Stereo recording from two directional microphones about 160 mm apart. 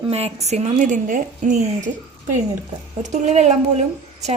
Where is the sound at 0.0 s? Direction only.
40° right (ahead or behind).